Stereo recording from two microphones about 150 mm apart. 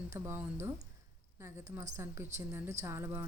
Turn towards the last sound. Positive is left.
turn(degrees=-15)  # may be behind; listen again after turning